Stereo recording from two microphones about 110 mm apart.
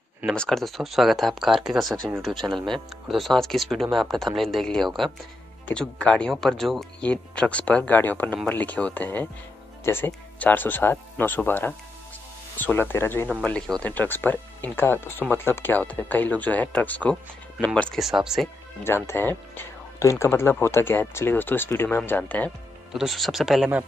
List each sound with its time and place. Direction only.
0.3 s speech: 5° left (ahead or behind); by 13.3 s 20° left (ahead or behind)
13.4 s speech: 10° left (ahead or behind)
17.9 s speech: 5° right (ahead or behind)
18.9 s speech: 20° left (ahead or behind)
22.9 s speech: centre (ahead or behind)